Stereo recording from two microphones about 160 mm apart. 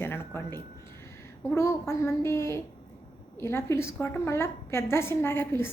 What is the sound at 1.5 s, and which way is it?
Speech, 15° left (ahead or behind).